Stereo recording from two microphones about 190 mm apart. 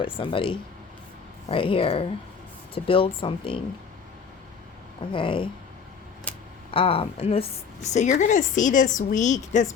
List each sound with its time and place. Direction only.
0.0 s speech: 25° left (ahead or behind)
5.1 s speech: 25° left (ahead or behind)
6.3 s a sound: 5° left (ahead or behind)
6.7 s a woman's voice: 30° left (ahead or behind)